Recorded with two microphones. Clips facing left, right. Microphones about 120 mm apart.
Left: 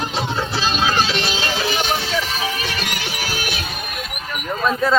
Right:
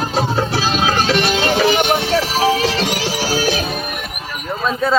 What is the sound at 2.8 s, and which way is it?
Music, 35° right (ahead or behind).